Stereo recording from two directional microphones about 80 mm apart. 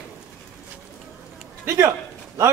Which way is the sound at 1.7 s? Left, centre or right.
Right.